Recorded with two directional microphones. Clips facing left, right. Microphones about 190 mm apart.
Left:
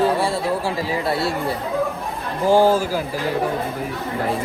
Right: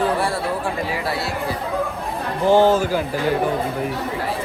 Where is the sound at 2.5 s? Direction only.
10° left (ahead or behind).